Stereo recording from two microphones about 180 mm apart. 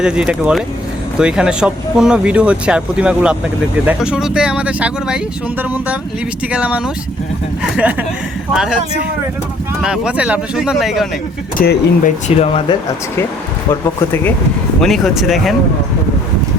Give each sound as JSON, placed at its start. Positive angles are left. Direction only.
{"t": 0.0, "sound": "speech", "side_deg": -5}
{"t": 9.8, "sound": "speech", "side_deg": -5}
{"t": 11.5, "sound": "speech", "side_deg": 55}
{"t": 12.4, "sound": "speech", "side_deg": 35}
{"t": 14.8, "sound": "speech", "side_deg": 0}